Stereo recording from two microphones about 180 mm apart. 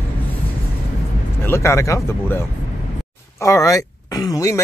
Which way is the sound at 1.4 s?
15° left (ahead or behind).